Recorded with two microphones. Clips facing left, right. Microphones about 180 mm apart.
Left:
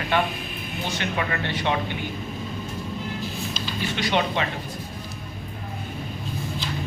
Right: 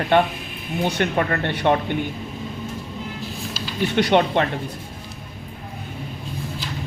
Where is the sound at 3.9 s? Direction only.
60° right (ahead or behind).